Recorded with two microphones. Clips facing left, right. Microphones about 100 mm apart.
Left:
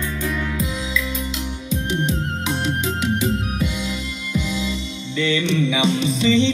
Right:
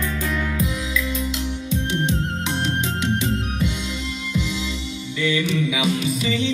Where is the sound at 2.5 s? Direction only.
10° left (ahead or behind).